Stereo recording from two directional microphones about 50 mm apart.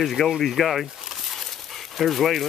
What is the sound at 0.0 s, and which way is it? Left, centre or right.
Speech, centre.